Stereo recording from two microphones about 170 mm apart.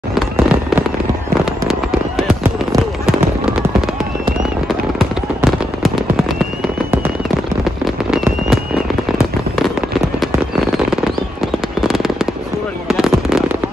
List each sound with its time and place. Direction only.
0.1 s fireworks: 5° right (ahead or behind)
4.6 s fireworks: centre (ahead or behind)
7.8 s fireworks: centre (ahead or behind)
11.8 s fireworks: centre (ahead or behind)